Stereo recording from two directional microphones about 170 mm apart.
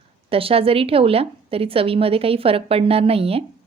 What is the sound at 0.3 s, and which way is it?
A woman's voice, 35° right (ahead or behind).